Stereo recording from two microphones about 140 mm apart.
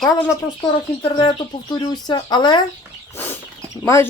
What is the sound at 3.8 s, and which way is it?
Speech, 20° left (ahead or behind).